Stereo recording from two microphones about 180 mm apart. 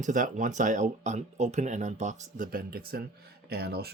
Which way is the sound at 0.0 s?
45° right (ahead or behind).